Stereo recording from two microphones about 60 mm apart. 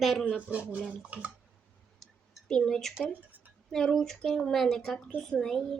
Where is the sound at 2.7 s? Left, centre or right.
Centre.